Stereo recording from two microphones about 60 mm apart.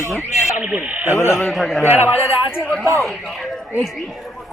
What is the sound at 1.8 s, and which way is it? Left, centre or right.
Speech, right.